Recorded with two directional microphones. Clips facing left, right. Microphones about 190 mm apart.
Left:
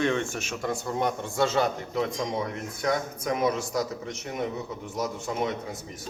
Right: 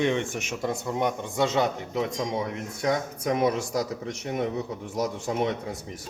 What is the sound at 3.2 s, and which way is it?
A man's voice, 30° right (ahead or behind).